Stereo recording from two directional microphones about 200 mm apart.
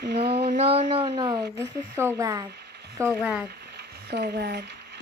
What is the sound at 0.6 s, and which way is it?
Speech, 30° right (ahead or behind).